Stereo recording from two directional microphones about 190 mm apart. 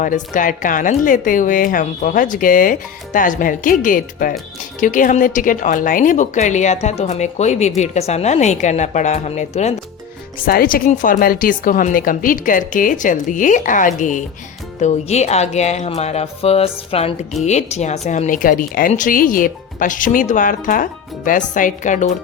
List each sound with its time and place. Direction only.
0.0 s a woman's voice: 45° left (ahead or behind)
10.4 s a woman's voice: 50° left (ahead or behind)